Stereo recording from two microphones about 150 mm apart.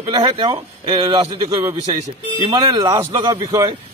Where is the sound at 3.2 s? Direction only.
30° right (ahead or behind).